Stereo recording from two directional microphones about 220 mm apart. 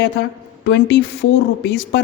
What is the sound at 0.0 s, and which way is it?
A woman's voice, 55° left (ahead or behind).